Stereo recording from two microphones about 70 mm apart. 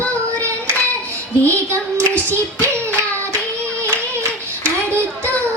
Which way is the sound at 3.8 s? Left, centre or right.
Right.